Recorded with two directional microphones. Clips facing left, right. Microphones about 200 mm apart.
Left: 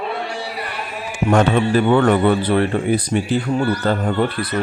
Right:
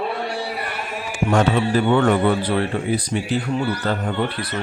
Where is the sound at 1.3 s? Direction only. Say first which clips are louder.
Left 3 dB; 50° left (ahead or behind).